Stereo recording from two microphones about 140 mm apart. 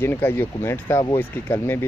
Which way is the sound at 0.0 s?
15° left (ahead or behind).